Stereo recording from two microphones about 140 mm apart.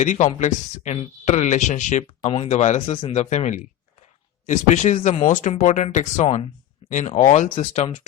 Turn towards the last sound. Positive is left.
turn(degrees=60)  # may be behind; listen again after turning